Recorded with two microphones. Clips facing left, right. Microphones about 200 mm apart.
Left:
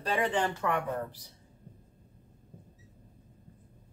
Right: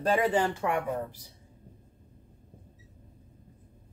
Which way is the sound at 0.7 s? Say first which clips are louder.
Right 2 dB; 10° right (ahead or behind).